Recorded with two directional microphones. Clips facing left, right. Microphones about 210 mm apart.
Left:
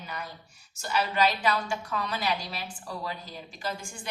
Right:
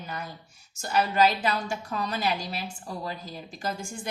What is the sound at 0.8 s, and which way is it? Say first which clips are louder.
A woman's voice: right 3 dB; 45° right (ahead or behind).